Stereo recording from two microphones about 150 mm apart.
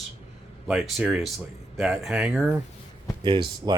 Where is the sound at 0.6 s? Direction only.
Centre (ahead or behind).